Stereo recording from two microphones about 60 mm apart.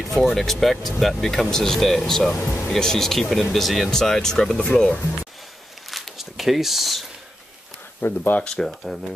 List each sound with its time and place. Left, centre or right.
0.1 s speech: centre
2.3 s speech: left
2.7 s speech: centre
5.9 s a sound: centre
8.0 s speech: left
8.5 s speech: centre